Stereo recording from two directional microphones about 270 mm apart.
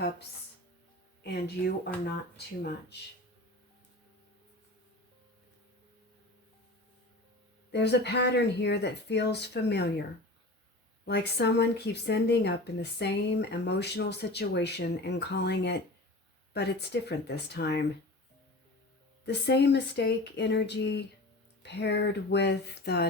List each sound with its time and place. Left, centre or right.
1.2 s speech: left
7.7 s speech: left
11.0 s speech: left
19.2 s speech: left